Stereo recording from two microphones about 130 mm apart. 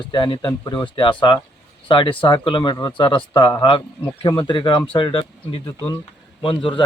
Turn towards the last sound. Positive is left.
turn(degrees=40)  # may be behind; listen again after turning